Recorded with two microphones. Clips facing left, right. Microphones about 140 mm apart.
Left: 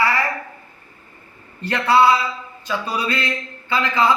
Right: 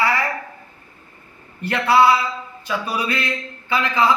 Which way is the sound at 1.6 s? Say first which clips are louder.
Even; 10° right (ahead or behind).